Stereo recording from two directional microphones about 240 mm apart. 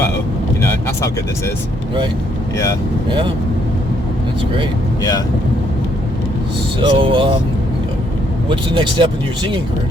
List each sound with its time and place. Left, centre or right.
3.1 s speech: right
6.7 s speech: right
8.4 s speech: right